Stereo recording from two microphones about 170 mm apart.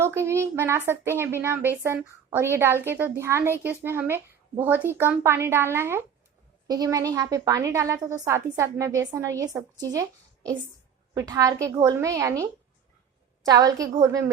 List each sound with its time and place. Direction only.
0.0 s a woman's voice: 15° right (ahead or behind)
13.5 s a woman's voice: 20° right (ahead or behind)